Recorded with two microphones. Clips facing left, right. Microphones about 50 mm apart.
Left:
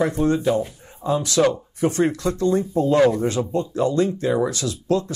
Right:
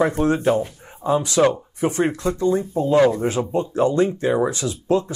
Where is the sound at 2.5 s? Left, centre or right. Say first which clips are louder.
Left 1 dB; right.